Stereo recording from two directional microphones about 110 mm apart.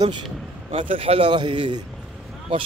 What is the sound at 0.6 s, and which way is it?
Speech, 55° right (ahead or behind).